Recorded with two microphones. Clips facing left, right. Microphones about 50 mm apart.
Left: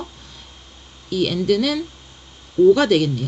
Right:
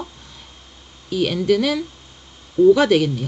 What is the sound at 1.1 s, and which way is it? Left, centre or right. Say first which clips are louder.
A woman's voice: right 1 dB; centre.